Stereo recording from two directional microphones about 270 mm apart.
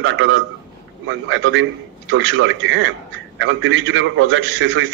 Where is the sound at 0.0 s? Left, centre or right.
Right.